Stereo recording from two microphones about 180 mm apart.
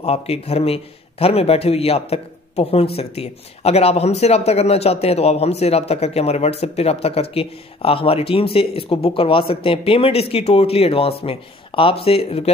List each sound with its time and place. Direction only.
0.0 s a man's voice: 35° left (ahead or behind)